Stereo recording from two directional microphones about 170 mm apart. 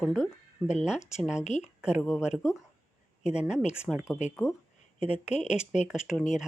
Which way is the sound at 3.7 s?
5° right (ahead or behind).